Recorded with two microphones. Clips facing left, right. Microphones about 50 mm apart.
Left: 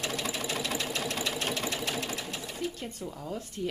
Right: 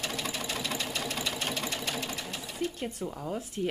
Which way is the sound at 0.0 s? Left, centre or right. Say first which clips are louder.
Left 1 dB; centre.